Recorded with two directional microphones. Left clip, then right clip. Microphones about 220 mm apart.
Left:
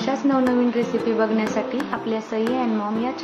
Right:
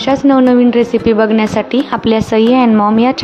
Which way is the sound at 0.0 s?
40° right (ahead or behind).